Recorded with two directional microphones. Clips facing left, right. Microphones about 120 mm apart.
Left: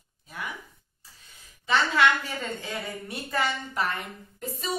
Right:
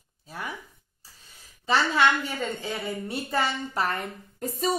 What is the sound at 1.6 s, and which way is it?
A woman's voice, 30° right (ahead or behind).